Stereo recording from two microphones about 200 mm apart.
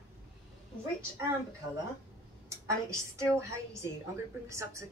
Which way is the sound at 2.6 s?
15° right (ahead or behind).